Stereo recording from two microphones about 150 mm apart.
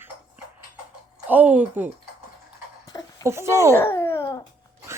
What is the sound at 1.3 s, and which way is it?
Speech, 10° right (ahead or behind).